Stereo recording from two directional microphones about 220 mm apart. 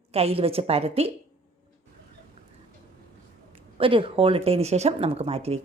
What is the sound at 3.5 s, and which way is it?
Speech, 25° right (ahead or behind).